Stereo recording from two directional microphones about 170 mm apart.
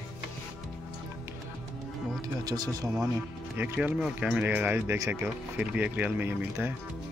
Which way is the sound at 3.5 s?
10° right (ahead or behind).